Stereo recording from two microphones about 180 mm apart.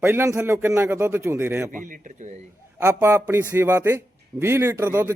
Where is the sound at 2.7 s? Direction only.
15° right (ahead or behind).